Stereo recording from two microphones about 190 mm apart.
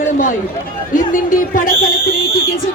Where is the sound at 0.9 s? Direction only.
45° left (ahead or behind).